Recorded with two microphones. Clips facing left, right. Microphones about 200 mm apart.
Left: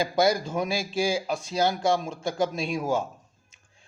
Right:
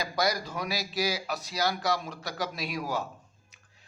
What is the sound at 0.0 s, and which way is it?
A man's voice, 25° left (ahead or behind).